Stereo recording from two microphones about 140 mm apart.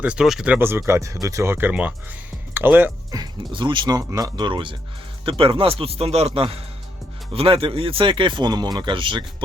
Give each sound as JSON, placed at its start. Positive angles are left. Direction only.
{"t": 0.0, "sound": "speech", "side_deg": -5}
{"t": 3.1, "sound": "speech", "side_deg": -30}